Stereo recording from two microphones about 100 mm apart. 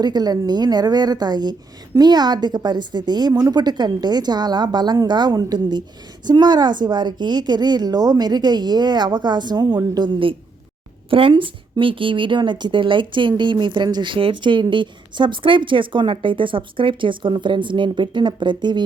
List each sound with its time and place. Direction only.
0.0 s a woman's voice: 45° right (ahead or behind)